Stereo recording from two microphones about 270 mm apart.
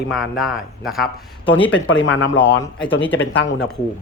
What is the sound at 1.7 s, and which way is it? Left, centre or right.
Speech, left.